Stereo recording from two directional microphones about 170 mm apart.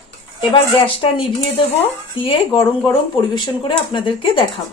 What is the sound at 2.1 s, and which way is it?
A woman's voice, 30° left (ahead or behind).